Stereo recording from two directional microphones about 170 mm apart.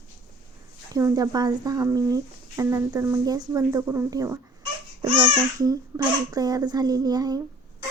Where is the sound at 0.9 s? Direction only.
20° right (ahead or behind).